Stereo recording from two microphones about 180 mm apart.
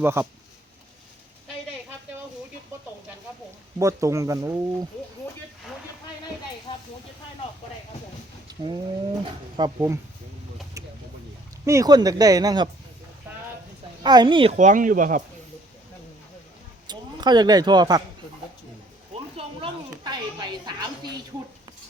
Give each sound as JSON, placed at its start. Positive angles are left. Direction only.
{"t": 0.0, "sound": "speech", "side_deg": -15}
{"t": 3.8, "sound": "speech", "side_deg": -15}
{"t": 6.7, "sound": "hiss", "side_deg": 25}
{"t": 8.4, "sound": "a sound", "side_deg": -25}
{"t": 9.6, "sound": "speech", "side_deg": -20}
{"t": 10.8, "sound": "a sound", "side_deg": -20}
{"t": 11.6, "sound": "speech", "side_deg": -15}
{"t": 14.0, "sound": "speech", "side_deg": -25}
{"t": 14.5, "sound": "speech", "side_deg": -45}
{"t": 16.8, "sound": "speech", "side_deg": -25}
{"t": 19.1, "sound": "a sound", "side_deg": -30}